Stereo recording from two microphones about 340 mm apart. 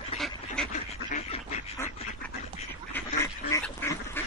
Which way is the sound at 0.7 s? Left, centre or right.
Left.